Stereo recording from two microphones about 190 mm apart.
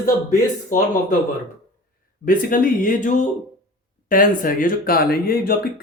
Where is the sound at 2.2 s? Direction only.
45° left (ahead or behind).